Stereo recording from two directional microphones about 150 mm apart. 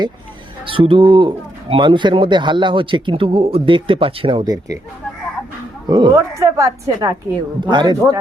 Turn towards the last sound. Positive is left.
turn(degrees=-30)  # may be behind; listen again after turning